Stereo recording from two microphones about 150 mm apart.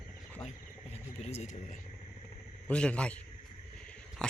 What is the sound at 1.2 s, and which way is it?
Speech, 50° left (ahead or behind).